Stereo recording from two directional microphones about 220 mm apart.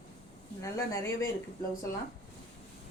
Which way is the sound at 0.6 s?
15° left (ahead or behind).